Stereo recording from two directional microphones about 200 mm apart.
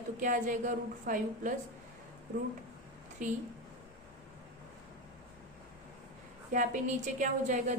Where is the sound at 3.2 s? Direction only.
40° right (ahead or behind).